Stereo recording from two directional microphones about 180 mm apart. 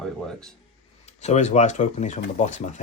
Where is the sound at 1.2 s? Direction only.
40° left (ahead or behind).